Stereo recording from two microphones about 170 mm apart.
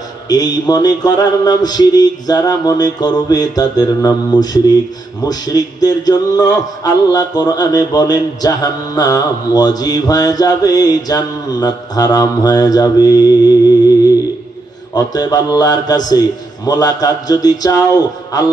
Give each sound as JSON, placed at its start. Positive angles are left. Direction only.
{"t": 0.3, "sound": "music", "side_deg": 25}
{"t": 15.0, "sound": "music", "side_deg": 20}